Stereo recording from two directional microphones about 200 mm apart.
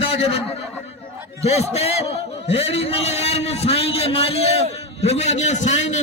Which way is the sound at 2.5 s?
30° left (ahead or behind).